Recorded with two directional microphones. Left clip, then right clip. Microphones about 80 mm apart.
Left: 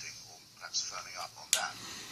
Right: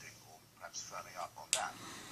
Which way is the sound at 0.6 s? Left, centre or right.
Right.